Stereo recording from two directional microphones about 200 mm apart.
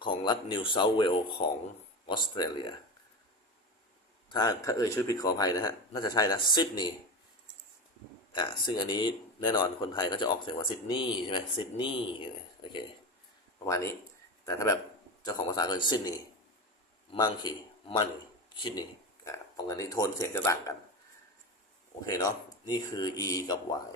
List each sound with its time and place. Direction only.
0.0 s speech: 25° left (ahead or behind)
4.3 s speech: 20° left (ahead or behind)
8.3 s speech: 25° left (ahead or behind)
13.7 s speech: 15° left (ahead or behind)
22.0 s speech: 20° left (ahead or behind)